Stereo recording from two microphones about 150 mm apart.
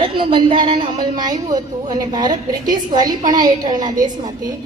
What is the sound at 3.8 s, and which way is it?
Speech, 60° right (ahead or behind).